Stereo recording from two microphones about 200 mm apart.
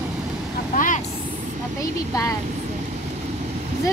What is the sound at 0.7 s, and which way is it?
Vehicle, 40° left (ahead or behind).